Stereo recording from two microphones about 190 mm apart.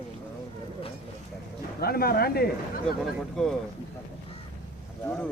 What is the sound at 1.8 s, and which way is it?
Speech, 55° left (ahead or behind).